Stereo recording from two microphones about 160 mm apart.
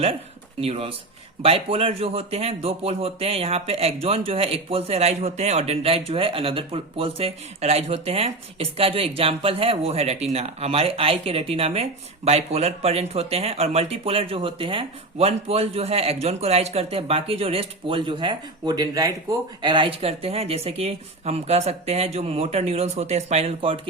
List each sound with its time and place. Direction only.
0.6 s speech: 40° right (ahead or behind)